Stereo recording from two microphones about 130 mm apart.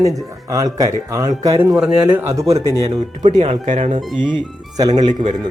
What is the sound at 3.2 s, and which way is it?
Speech, 60° right (ahead or behind).